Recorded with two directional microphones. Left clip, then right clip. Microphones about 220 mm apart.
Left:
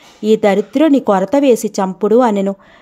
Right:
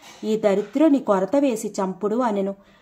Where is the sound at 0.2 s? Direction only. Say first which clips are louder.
Left 8 dB; 40° left (ahead or behind).